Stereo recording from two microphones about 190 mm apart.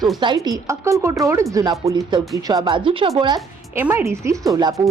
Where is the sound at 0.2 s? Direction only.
20° right (ahead or behind).